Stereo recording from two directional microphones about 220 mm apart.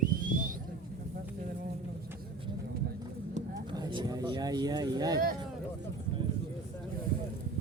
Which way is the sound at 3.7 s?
20° right (ahead or behind).